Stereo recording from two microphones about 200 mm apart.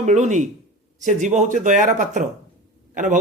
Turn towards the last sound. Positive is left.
turn(degrees=-40)  # may be behind; listen again after turning